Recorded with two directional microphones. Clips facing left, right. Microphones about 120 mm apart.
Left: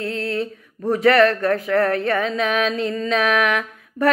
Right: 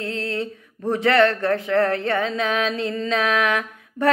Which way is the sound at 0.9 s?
30° right (ahead or behind).